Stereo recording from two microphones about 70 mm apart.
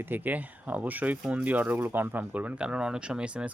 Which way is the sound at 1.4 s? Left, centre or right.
Right.